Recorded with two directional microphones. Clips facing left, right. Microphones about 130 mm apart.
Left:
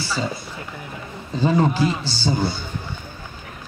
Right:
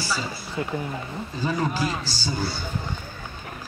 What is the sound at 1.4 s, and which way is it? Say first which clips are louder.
Speech: left 7 dB; 25° left (ahead or behind).